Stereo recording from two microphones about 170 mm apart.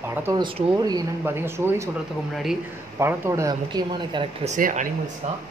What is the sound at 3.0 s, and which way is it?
Speech, 15° right (ahead or behind).